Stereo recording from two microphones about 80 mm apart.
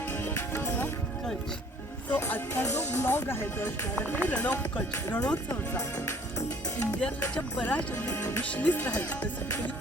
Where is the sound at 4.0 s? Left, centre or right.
Centre.